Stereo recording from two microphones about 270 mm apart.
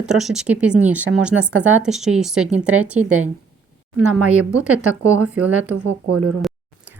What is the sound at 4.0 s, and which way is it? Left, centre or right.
Speech, right.